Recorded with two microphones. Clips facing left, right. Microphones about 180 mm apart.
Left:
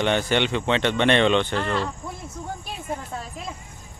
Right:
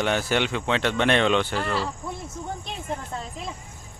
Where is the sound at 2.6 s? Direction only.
5° left (ahead or behind).